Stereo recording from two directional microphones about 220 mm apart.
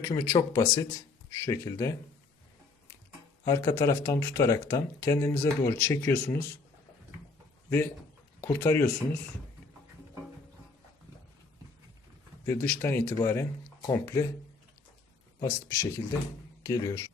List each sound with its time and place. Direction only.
0.0 s speech: 15° left (ahead or behind)
3.4 s speech: 15° left (ahead or behind)
8.4 s speech: 10° left (ahead or behind)
12.5 s speech: 10° left (ahead or behind)
15.4 s speech: 15° left (ahead or behind)